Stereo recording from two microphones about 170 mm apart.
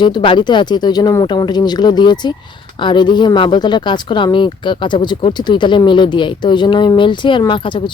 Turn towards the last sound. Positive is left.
turn(degrees=30)  # may be behind; listen again after turning